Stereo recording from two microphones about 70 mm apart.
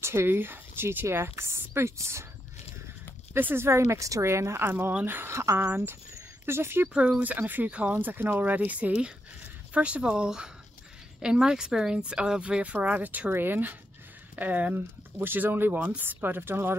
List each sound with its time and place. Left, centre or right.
0.0 s speech: right
3.3 s speech: right
7.2 s a woman's voice: right